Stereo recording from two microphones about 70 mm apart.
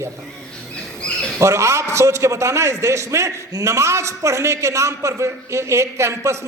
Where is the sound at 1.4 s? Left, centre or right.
Right.